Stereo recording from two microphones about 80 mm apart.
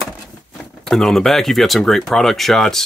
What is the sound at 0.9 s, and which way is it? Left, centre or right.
Speech, centre.